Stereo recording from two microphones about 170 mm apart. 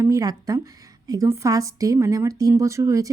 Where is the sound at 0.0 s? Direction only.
20° right (ahead or behind).